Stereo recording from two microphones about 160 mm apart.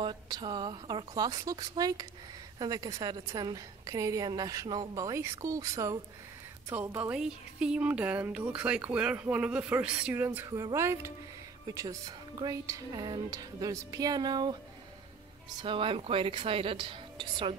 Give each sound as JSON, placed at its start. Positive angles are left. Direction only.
{"t": 0.0, "sound": "a woman's voice", "side_deg": -25}
{"t": 15.6, "sound": "speech", "side_deg": -35}